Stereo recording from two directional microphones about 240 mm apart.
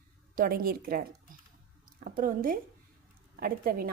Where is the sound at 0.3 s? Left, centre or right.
Right.